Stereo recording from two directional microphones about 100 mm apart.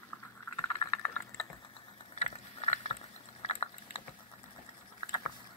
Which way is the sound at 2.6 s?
90° left.